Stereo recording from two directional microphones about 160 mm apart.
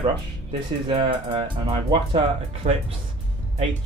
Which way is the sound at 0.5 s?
30° right (ahead or behind).